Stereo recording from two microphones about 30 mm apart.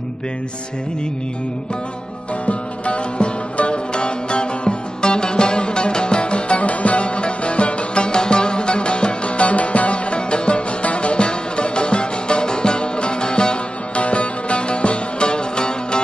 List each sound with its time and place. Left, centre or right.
2.4 s music: left
6.6 s music: left
14.0 s music: left